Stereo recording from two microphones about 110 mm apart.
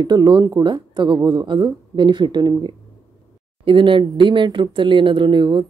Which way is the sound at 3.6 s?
50° right (ahead or behind).